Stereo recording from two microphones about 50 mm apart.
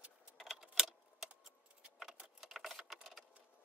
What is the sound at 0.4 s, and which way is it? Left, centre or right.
Keys jangling, centre.